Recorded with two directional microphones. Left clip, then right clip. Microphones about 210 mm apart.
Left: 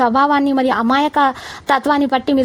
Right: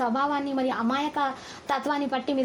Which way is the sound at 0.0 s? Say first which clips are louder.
Left 12 dB; 45° left (ahead or behind).